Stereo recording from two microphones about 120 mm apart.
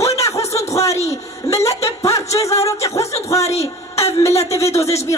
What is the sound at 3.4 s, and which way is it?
A man's voice, 60° left (ahead or behind).